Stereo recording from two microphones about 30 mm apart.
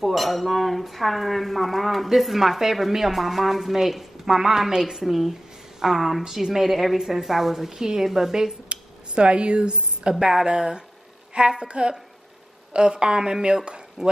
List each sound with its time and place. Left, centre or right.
0.0 s a woman's voice: centre
5.0 s a woman's voice: centre
7.7 s a woman's voice: centre
8.6 s a woman's voice: right
14.0 s speech: centre